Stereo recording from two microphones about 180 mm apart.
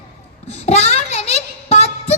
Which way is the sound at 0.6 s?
35° left (ahead or behind).